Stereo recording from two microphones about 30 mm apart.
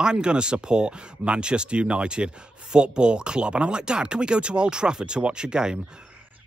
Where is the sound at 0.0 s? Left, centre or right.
Right.